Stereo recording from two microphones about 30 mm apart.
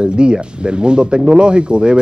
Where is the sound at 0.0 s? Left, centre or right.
Right.